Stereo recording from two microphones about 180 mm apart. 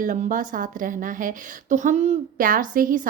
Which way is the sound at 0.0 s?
45° right (ahead or behind).